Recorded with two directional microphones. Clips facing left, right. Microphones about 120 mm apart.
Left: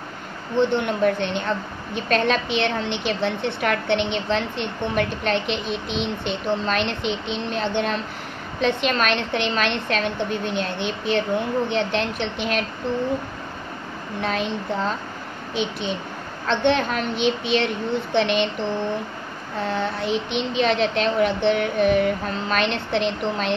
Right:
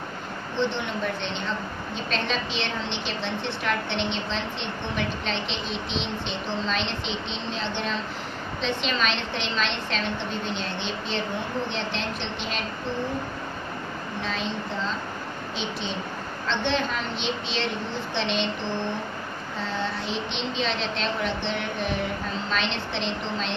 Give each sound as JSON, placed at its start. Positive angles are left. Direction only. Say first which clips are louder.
{"t": 0.6, "sound": "a woman's voice", "louder": "left 7 dB", "side_deg": 55}
{"t": 14.2, "sound": "a woman's voice", "louder": "left 7 dB", "side_deg": 60}
{"t": 19.6, "sound": "a woman's voice", "louder": "left 6 dB", "side_deg": 55}